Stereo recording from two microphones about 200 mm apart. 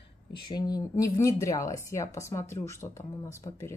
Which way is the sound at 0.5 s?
20° left (ahead or behind).